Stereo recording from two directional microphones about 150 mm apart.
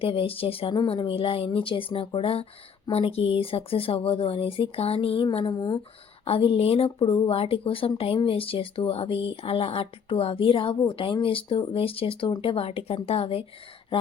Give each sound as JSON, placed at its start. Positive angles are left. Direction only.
{"t": 0.0, "sound": "speech", "side_deg": 40}